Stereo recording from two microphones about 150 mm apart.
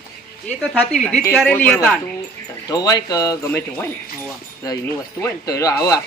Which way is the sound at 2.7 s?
25° left (ahead or behind).